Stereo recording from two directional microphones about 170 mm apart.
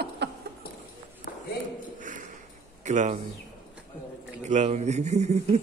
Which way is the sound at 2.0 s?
50° right (ahead or behind).